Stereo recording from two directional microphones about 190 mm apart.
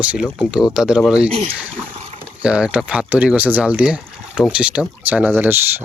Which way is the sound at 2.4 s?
5° right (ahead or behind).